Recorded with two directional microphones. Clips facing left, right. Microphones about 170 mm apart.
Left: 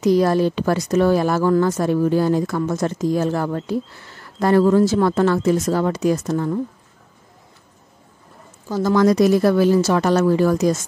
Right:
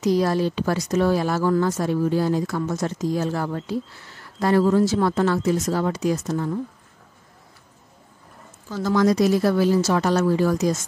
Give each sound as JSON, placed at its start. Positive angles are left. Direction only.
{"t": 0.0, "sound": "speech", "side_deg": 55}
{"t": 8.6, "sound": "speech", "side_deg": 40}
{"t": 8.9, "sound": "speech", "side_deg": 55}